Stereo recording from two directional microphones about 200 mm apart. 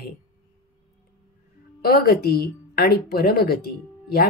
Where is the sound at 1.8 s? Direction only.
50° left (ahead or behind).